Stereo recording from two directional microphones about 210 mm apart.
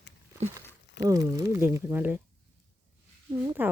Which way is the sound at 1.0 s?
15° right (ahead or behind).